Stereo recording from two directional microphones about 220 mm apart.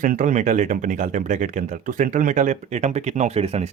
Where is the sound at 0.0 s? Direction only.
35° right (ahead or behind).